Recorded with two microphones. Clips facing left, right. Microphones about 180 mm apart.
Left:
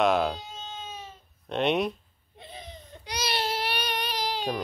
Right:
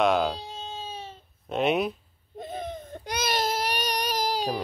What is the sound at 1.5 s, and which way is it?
Speech, centre (ahead or behind).